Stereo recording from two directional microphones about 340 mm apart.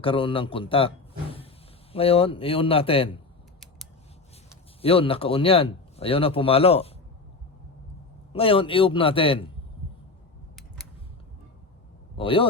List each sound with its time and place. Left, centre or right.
0.0 s a man's voice: centre
4.8 s a man's voice: centre
8.3 s a man's voice: centre
12.1 s a man's voice: centre